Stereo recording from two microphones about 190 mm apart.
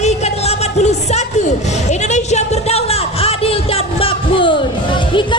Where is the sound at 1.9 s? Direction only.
40° left (ahead or behind).